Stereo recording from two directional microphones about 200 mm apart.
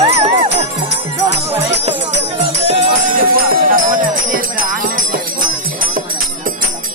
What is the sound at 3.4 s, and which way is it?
Jingle bell, 45° right (ahead or behind).